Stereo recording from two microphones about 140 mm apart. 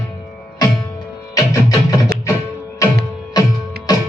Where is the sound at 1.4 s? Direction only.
25° left (ahead or behind).